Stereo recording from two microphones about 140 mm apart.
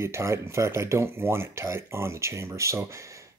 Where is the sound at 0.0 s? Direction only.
20° right (ahead or behind).